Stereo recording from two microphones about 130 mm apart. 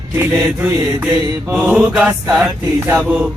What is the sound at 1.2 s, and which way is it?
Mantra, 15° right (ahead or behind).